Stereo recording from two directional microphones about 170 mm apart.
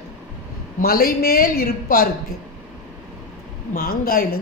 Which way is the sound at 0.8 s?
60° left (ahead or behind).